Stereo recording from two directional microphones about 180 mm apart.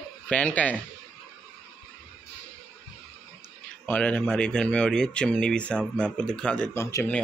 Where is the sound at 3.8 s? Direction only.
5° left (ahead or behind).